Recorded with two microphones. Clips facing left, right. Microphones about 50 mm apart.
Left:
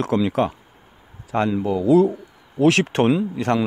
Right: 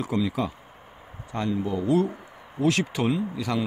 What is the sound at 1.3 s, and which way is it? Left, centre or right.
Speech, left.